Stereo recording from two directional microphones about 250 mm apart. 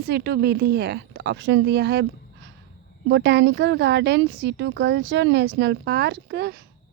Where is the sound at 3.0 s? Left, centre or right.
Right.